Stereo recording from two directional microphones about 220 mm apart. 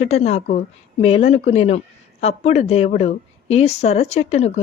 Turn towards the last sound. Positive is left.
turn(degrees=30)  # may be behind; listen again after turning